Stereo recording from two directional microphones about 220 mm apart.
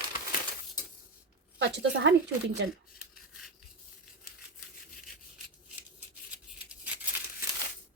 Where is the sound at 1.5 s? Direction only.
55° right (ahead or behind).